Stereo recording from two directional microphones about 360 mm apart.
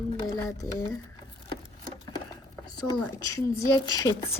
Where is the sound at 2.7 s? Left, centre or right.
Centre.